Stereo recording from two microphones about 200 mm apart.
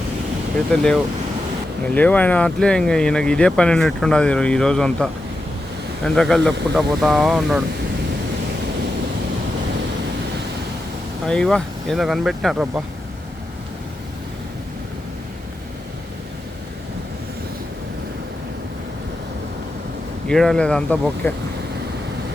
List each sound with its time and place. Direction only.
0.7 s speech: 5° left (ahead or behind)
6.1 s speech: 5° left (ahead or behind)
11.3 s speech: 5° left (ahead or behind)
20.2 s speech: centre (ahead or behind)